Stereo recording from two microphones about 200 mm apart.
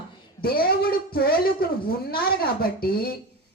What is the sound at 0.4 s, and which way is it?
Speech, 50° left (ahead or behind).